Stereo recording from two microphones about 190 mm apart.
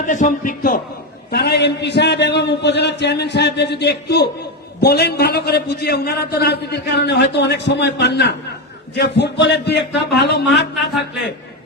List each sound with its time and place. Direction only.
0.0 s a man's voice: 40° left (ahead or behind)
1.3 s a man's voice: 60° left (ahead or behind)